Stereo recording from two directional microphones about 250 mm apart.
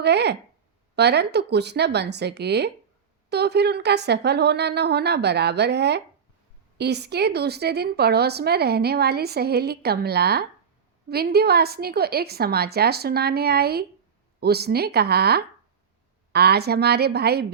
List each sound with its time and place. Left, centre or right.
0.0 s a woman's voice: right